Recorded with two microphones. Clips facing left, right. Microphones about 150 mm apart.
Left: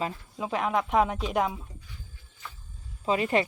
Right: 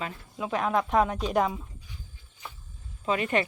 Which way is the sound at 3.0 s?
30° left (ahead or behind).